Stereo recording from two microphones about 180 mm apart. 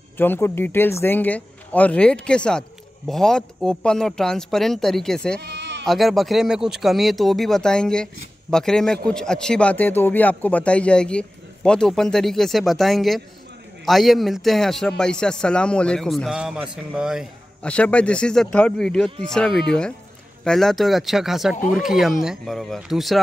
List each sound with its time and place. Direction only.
0.2 s speech: 10° left (ahead or behind)
5.4 s bleat: 70° right (ahead or behind)
5.9 s speech: centre (ahead or behind)
17.6 s speech: 5° left (ahead or behind)